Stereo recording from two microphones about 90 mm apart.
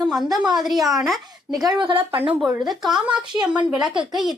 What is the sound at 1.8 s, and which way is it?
Speech, 75° right (ahead or behind).